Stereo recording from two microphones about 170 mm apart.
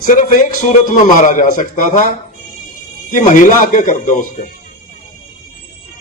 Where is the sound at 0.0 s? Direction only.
50° left (ahead or behind).